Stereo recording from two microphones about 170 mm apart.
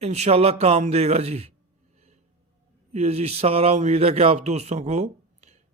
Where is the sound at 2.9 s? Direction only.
40° right (ahead or behind).